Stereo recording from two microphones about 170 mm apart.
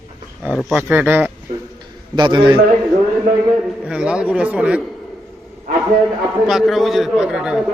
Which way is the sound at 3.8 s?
5° right (ahead or behind).